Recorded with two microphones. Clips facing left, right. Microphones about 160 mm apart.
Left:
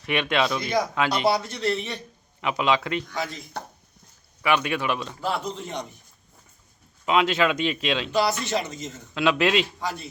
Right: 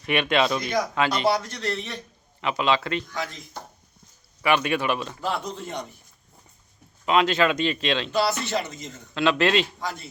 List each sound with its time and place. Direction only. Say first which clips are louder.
0.0 s speech: right 2 dB; 5° right (ahead or behind)
0.7 s speech: even; 5° left (ahead or behind)
4.4 s speech: right 1 dB; centre (ahead or behind)
5.2 s speech: left 1 dB; 10° left (ahead or behind)
7.0 s speech: right 1 dB; 5° left (ahead or behind)
8.1 s speech: left 2 dB; 15° left (ahead or behind)
9.1 s speech: even; 5° left (ahead or behind)